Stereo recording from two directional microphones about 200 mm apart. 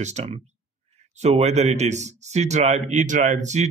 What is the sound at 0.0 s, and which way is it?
Speech, 35° right (ahead or behind).